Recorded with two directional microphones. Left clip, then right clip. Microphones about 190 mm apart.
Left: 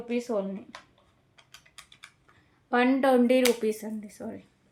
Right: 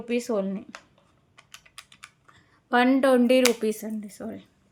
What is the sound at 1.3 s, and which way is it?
Typing, 30° right (ahead or behind).